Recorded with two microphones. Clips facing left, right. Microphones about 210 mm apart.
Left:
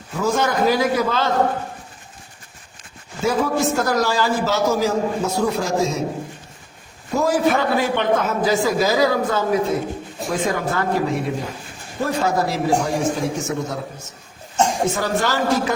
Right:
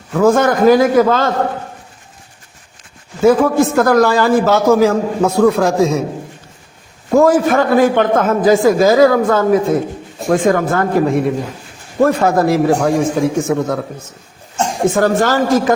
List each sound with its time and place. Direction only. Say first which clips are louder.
0.1 s a man's voice: right 9 dB; 55° right (ahead or behind)
3.2 s a man's voice: right 9 dB; 55° right (ahead or behind)
7.1 s a man's voice: right 7 dB; 55° right (ahead or behind)
14.8 s a man's voice: right 8 dB; 50° right (ahead or behind)